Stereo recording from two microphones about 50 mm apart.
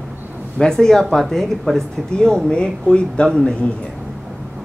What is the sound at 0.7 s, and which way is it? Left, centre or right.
Speech, centre.